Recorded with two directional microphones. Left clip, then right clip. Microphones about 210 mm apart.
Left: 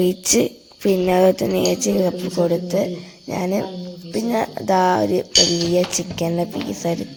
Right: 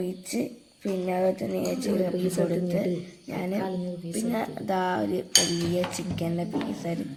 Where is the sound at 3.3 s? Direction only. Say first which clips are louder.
Left 8 dB; 35° left (ahead or behind).